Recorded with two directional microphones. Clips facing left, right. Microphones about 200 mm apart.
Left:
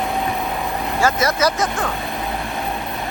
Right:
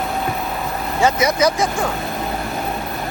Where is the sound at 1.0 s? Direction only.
20° right (ahead or behind).